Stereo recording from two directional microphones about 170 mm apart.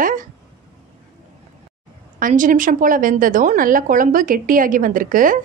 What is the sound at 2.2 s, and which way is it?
A woman's voice, 50° right (ahead or behind).